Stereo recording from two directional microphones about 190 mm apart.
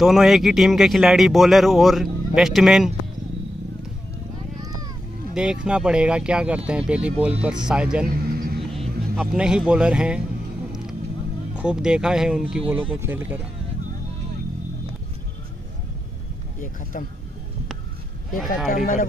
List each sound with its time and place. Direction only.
0.0 s speech: centre (ahead or behind)
5.3 s speech: 5° right (ahead or behind)
8.1 s vehicle: 50° right (ahead or behind)
8.7 s speech: 5° right (ahead or behind)
11.5 s speech: 5° right (ahead or behind)
18.7 s speech: 45° left (ahead or behind)